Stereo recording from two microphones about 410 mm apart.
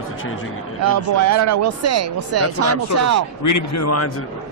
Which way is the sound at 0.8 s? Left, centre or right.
Right.